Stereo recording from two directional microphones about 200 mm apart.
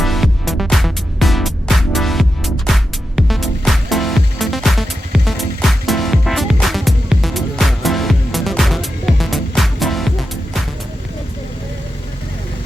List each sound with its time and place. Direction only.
0.0 s music: centre (ahead or behind)